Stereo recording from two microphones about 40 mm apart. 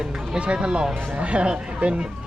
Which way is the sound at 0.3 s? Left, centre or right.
Right.